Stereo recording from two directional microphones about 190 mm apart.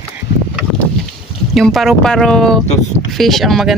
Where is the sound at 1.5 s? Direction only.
Centre (ahead or behind).